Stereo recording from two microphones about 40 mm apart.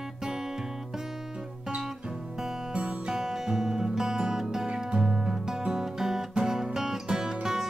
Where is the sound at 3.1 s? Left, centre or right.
Centre.